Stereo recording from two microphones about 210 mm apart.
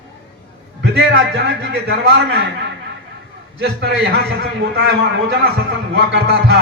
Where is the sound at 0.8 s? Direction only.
55° right (ahead or behind).